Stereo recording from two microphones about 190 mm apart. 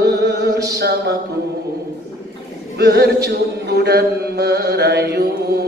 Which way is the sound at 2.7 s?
60° right (ahead or behind).